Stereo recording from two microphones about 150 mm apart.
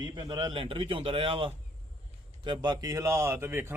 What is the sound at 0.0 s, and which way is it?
A man's voice, 30° right (ahead or behind).